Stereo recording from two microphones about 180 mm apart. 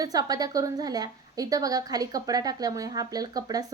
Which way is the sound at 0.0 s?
20° right (ahead or behind).